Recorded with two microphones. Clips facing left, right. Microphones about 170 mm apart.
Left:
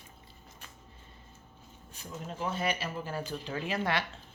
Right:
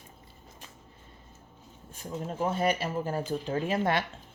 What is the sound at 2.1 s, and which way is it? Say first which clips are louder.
Speech: right 5 dB; 45° right (ahead or behind).